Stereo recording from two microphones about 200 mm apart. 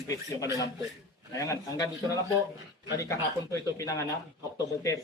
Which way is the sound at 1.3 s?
15° left (ahead or behind).